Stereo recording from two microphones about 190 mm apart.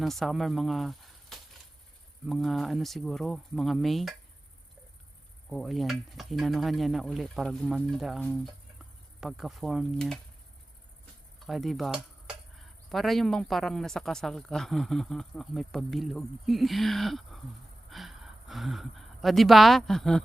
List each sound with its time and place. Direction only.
0.0 s speech: centre (ahead or behind)
5.5 s speech: centre (ahead or behind)
11.3 s speech: centre (ahead or behind)